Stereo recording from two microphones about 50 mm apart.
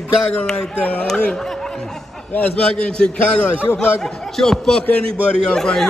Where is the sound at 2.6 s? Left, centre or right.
Centre.